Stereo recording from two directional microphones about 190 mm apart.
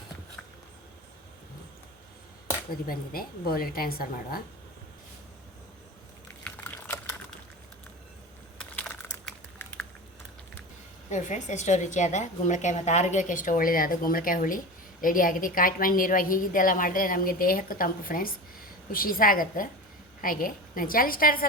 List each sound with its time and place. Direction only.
2.8 s a woman's voice: 50° left (ahead or behind)
6.4 s typing: 10° left (ahead or behind)
8.5 s typing: 5° left (ahead or behind)
11.1 s a woman's voice: 40° left (ahead or behind)